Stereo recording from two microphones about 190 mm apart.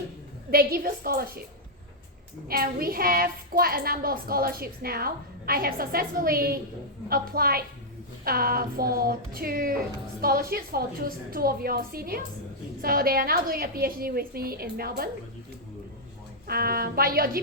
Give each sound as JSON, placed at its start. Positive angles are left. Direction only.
{"t": 0.5, "sound": "a woman's voice", "side_deg": -50}
{"t": 2.5, "sound": "a woman's voice", "side_deg": -50}
{"t": 16.5, "sound": "a woman's voice", "side_deg": -50}